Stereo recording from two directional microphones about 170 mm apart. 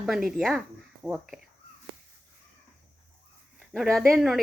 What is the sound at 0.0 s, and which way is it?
Speech, centre (ahead or behind).